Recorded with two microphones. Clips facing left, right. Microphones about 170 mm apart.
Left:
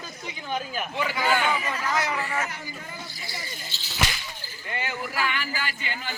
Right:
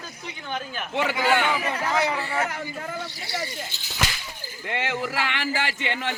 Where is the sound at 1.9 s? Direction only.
30° right (ahead or behind).